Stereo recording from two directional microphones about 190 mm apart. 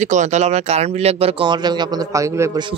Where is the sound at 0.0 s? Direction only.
40° right (ahead or behind).